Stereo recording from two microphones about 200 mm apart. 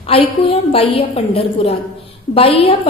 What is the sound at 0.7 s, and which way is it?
A woman's voice, 30° left (ahead or behind).